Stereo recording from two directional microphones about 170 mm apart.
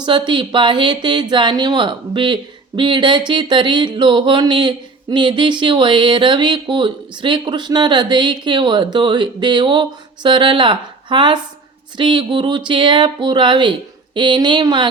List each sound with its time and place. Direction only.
0.0 s speech: 25° right (ahead or behind)